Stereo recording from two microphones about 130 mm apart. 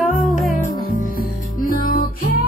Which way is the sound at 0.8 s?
90° left.